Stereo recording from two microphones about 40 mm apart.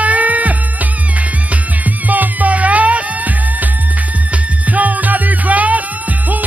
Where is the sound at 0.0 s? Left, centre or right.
Right.